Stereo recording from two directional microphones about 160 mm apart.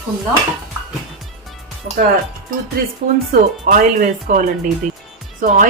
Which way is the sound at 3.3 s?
60° right (ahead or behind).